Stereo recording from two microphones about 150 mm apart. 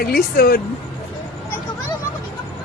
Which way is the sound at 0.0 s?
90° left.